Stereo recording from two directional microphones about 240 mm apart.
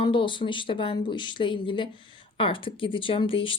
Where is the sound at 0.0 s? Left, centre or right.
Left.